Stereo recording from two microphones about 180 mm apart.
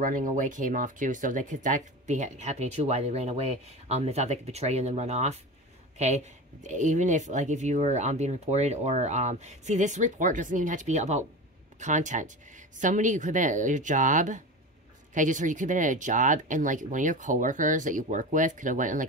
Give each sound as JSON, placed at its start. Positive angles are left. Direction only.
{"t": 0.0, "sound": "speech", "side_deg": -45}